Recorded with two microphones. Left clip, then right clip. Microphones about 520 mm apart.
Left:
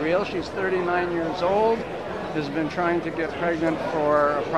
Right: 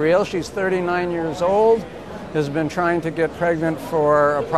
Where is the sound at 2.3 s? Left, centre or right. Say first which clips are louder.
Right 7 dB; right.